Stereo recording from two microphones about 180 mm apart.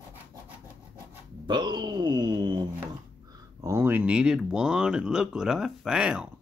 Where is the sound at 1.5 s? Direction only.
25° right (ahead or behind).